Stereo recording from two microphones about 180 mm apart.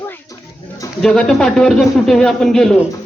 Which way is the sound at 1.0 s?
5° left (ahead or behind).